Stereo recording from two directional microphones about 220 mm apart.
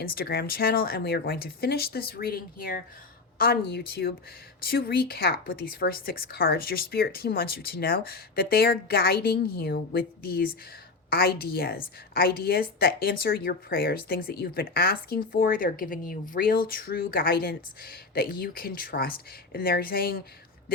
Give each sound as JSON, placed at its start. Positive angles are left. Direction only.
{"t": 0.0, "sound": "speech", "side_deg": 45}